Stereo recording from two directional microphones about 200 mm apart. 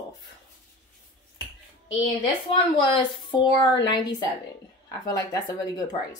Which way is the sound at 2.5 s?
25° left (ahead or behind).